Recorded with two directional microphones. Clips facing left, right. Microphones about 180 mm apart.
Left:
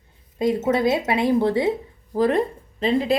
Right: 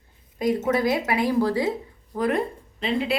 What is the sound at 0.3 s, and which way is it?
A woman's voice, 25° left (ahead or behind).